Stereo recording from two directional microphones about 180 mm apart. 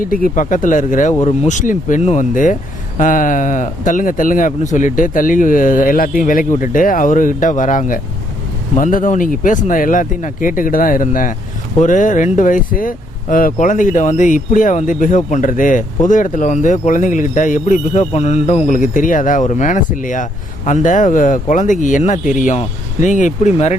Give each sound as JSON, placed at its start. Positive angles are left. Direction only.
{"t": 0.0, "sound": "speech", "side_deg": 50}